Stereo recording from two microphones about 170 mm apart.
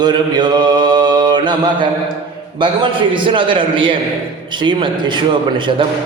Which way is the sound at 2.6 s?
30° right (ahead or behind).